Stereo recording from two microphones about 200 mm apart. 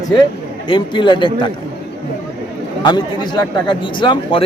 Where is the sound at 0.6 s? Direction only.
25° left (ahead or behind).